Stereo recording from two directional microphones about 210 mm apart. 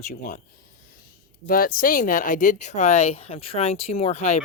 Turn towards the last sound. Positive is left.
turn(degrees=30)  # may be behind; listen again after turning